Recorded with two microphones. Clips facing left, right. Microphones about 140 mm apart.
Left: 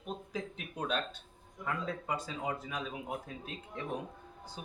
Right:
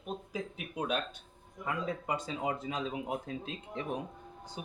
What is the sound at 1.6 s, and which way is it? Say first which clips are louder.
Speech: right 2 dB; 15° right (ahead or behind).